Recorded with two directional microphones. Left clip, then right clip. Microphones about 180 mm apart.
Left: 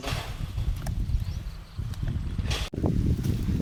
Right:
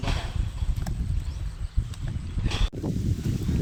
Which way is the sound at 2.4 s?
55° left (ahead or behind).